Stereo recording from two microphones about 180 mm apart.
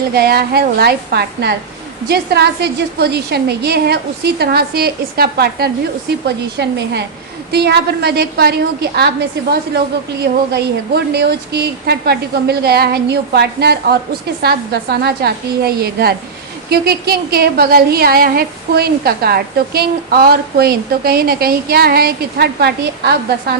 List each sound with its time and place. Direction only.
0.1 s a woman's voice: 60° right (ahead or behind)